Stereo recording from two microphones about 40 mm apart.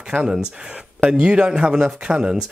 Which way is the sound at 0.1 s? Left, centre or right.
Right.